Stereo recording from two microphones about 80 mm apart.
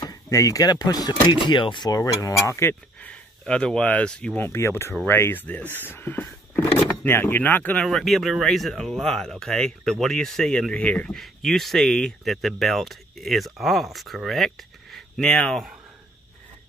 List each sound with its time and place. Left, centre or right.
0.3 s speech: left
1.9 s speech: left
3.0 s speech: centre
4.4 s speech: left
7.7 s speech: centre
11.1 s speech: centre